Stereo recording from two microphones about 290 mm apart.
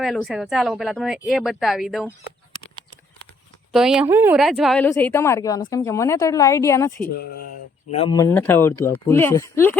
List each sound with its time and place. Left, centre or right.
0.0 s speech: centre
3.7 s a woman's voice: centre
7.2 s speech: left
7.9 s a woman's voice: centre